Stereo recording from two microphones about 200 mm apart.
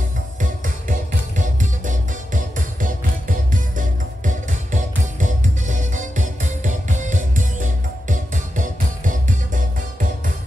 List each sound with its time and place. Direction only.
0.4 s music: 40° right (ahead or behind)